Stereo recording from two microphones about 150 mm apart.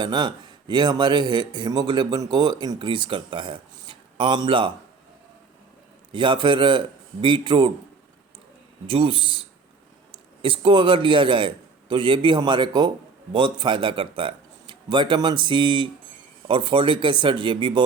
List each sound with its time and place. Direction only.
0.0 s speech: 30° right (ahead or behind)
6.1 s speech: 30° right (ahead or behind)
8.9 s a man's voice: 35° right (ahead or behind)